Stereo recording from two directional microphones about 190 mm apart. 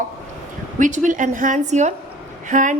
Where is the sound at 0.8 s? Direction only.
40° right (ahead or behind).